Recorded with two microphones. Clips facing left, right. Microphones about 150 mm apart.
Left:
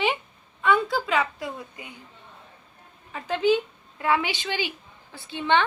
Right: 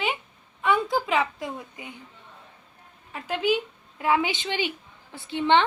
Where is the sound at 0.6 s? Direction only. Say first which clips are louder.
Left 1 dB; 15° right (ahead or behind).